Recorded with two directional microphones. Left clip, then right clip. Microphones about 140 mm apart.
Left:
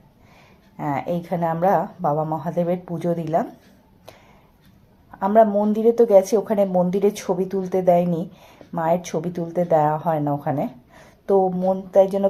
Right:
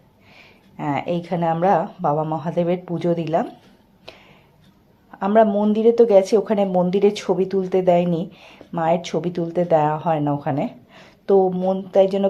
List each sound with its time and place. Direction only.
0.3 s a woman's voice: 30° right (ahead or behind)
4.1 s a sound: 25° right (ahead or behind)
5.1 s a woman's voice: 30° right (ahead or behind)